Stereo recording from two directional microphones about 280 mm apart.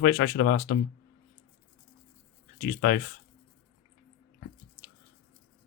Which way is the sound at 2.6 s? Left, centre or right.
Left.